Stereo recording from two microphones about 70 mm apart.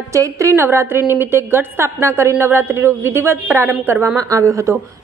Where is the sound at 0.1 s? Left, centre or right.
Right.